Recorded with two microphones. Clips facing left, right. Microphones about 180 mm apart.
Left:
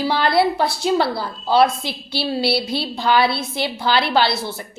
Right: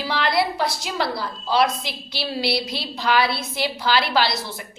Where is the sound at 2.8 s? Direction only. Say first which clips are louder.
Left 3 dB; 30° left (ahead or behind).